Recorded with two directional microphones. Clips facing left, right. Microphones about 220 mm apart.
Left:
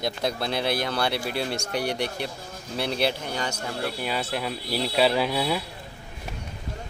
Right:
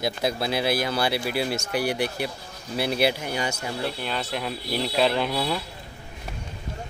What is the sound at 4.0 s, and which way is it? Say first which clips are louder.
Speech: left 1 dB; 10° left (ahead or behind).